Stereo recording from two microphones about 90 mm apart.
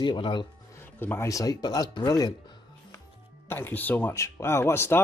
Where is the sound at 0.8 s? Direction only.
25° left (ahead or behind).